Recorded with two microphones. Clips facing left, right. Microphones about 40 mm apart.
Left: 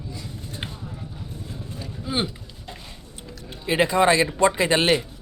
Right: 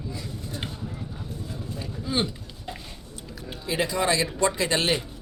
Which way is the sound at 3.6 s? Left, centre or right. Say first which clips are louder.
Left 6 dB; left.